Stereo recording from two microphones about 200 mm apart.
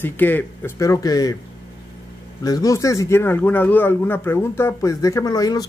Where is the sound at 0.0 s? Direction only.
10° left (ahead or behind).